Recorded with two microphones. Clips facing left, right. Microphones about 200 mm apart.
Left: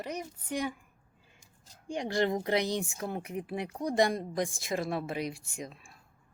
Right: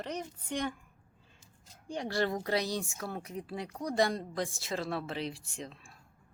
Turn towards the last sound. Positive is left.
turn(degrees=10)  # may be behind; listen again after turning